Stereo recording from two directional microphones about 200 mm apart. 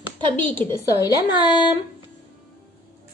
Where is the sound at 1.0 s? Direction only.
20° left (ahead or behind).